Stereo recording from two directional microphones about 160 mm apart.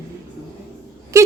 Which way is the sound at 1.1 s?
20° right (ahead or behind).